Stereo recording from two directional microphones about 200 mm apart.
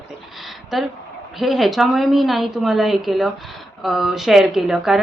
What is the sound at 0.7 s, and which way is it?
A woman's voice, centre (ahead or behind).